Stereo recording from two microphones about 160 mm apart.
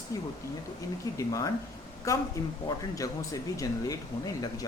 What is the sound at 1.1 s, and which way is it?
Speech, 20° left (ahead or behind).